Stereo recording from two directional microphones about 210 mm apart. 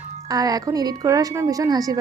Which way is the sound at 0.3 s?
15° right (ahead or behind).